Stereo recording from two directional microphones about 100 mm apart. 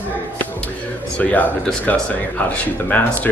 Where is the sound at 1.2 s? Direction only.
15° left (ahead or behind).